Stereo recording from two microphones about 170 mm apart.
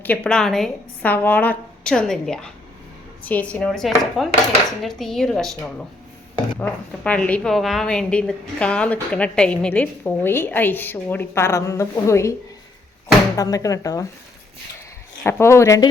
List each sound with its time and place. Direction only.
0.0 s a woman's voice: 10° left (ahead or behind)
13.3 s speech: 20° left (ahead or behind)
15.2 s a woman's voice: 15° left (ahead or behind)